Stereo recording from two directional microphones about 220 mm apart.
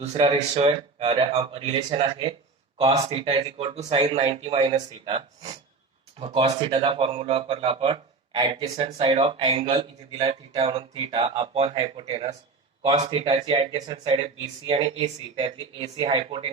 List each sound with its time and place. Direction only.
0.0 s speech: 30° right (ahead or behind)